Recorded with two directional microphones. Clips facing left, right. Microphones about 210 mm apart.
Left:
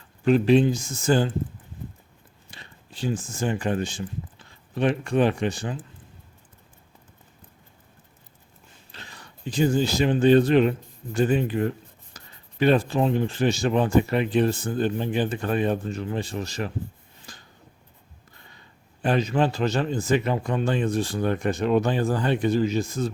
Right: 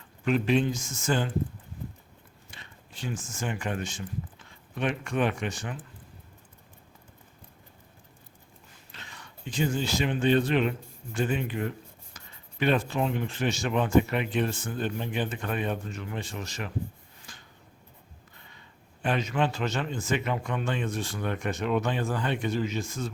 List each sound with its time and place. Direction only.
0.3 s speech: 35° left (ahead or behind)
2.5 s speech: 35° left (ahead or behind)
8.9 s speech: 35° left (ahead or behind)
17.3 s a sound: 35° left (ahead or behind)
19.0 s speech: 35° left (ahead or behind)